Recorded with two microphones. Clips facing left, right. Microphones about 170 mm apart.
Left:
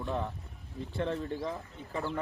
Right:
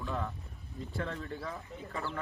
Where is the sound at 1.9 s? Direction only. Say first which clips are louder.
Left 4 dB; 20° left (ahead or behind).